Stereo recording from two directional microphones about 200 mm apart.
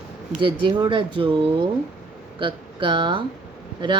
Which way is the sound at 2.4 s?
25° right (ahead or behind).